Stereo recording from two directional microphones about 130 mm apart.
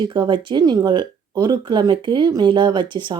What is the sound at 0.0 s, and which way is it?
A woman's voice, 35° right (ahead or behind).